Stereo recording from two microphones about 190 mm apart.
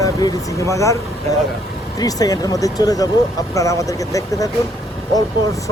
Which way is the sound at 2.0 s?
20° left (ahead or behind).